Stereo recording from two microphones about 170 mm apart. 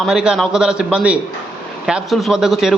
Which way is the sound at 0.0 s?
5° right (ahead or behind).